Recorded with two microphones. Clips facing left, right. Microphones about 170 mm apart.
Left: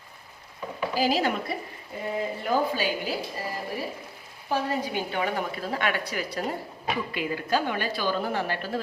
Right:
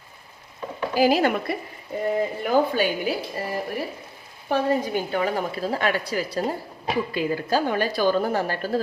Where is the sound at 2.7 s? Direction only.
60° right (ahead or behind).